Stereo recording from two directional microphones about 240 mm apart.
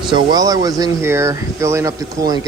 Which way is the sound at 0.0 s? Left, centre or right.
Centre.